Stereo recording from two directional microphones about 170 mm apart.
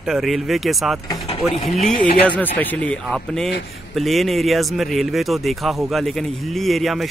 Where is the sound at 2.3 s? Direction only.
10° left (ahead or behind).